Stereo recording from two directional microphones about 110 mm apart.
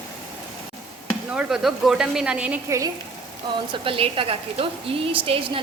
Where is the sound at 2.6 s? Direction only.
30° right (ahead or behind).